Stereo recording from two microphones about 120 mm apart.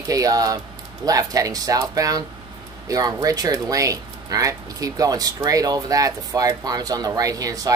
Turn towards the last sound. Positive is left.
turn(degrees=-30)  # may be behind; listen again after turning